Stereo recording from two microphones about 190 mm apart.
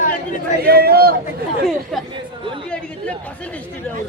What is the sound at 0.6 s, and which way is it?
Speech, 55° right (ahead or behind).